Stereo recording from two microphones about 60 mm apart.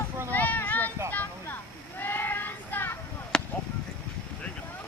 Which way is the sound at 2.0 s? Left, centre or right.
Left.